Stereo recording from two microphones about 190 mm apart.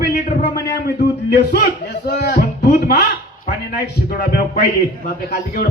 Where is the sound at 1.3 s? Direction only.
55° left (ahead or behind).